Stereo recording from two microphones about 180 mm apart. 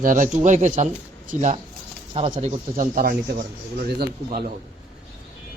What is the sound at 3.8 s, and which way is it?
Speech, 60° right (ahead or behind).